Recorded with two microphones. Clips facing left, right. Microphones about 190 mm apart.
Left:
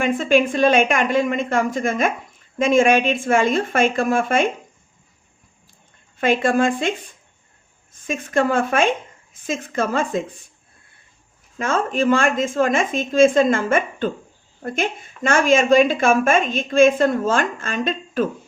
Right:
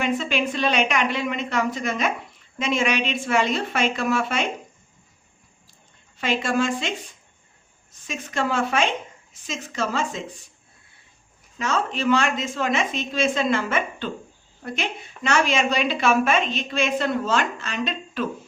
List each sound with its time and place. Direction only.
0.0 s a woman's voice: 50° left (ahead or behind)
6.1 s a woman's voice: 50° left (ahead or behind)
11.5 s a woman's voice: 50° left (ahead or behind)